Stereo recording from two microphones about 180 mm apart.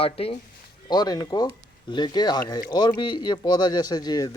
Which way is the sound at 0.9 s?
20° left (ahead or behind).